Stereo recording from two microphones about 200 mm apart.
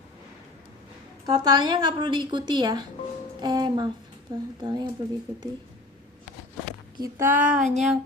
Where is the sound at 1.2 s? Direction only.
20° right (ahead or behind).